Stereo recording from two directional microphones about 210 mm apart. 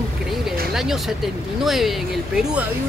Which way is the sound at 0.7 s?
Centre (ahead or behind).